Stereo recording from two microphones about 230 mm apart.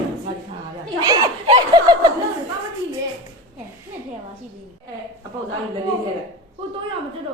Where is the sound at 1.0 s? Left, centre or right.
Right.